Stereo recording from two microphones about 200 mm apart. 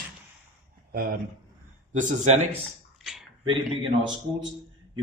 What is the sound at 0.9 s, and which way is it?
A man's voice, 45° right (ahead or behind).